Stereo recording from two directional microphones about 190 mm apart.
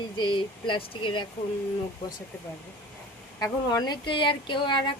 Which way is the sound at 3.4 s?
20° left (ahead or behind).